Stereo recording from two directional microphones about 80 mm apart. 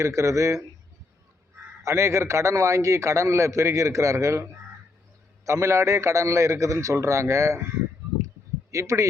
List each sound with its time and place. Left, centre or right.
0.0 s a man's voice: right
1.8 s a man's voice: right
5.5 s a man's voice: right
8.7 s a man's voice: right